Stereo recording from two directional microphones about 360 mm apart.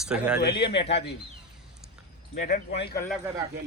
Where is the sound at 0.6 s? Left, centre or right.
Centre.